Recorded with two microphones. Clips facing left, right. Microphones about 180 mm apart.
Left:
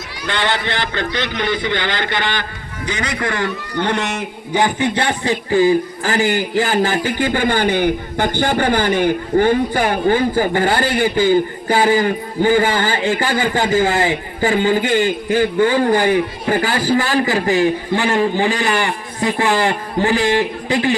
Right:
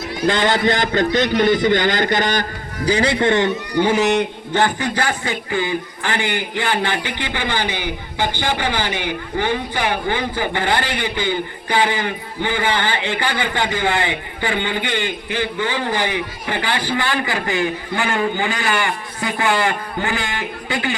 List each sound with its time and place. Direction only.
0.3 s a man's voice: 40° right (ahead or behind)
3.8 s a man's voice: 5° right (ahead or behind)
4.5 s a man's voice: 15° left (ahead or behind)
4.9 s a man's voice: 30° left (ahead or behind)